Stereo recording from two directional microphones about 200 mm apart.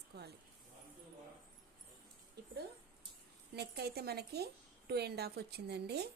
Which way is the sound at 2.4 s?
55° right (ahead or behind).